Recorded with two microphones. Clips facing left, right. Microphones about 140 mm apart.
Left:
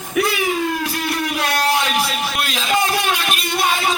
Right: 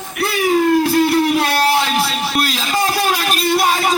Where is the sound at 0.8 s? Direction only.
30° right (ahead or behind).